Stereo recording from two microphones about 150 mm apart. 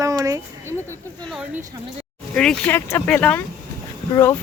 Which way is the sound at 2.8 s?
15° left (ahead or behind).